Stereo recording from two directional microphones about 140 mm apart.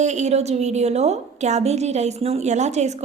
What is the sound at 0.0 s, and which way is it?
A woman's voice, 55° right (ahead or behind).